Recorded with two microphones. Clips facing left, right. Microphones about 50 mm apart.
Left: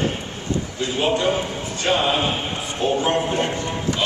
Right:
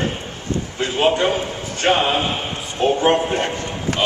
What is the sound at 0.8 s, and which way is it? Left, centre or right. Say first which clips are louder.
A man's voice: right 3 dB; right.